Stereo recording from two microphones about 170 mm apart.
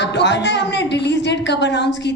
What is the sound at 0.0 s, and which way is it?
A woman's voice, 90° left.